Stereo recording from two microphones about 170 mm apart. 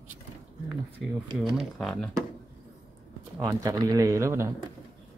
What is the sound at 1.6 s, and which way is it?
Speech, 5° left (ahead or behind).